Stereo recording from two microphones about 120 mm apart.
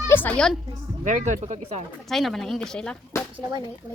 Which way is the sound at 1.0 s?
90° right.